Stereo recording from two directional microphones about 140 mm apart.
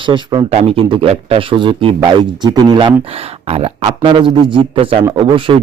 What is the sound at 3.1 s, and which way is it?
A man's voice, 45° right (ahead or behind).